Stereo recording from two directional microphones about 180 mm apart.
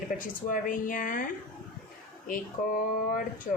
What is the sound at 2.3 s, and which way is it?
Speech, 50° left (ahead or behind).